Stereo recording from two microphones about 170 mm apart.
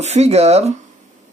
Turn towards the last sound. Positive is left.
turn(degrees=-40)  # may be behind; listen again after turning